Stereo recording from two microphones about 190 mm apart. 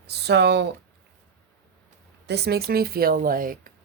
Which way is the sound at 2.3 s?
60° right (ahead or behind).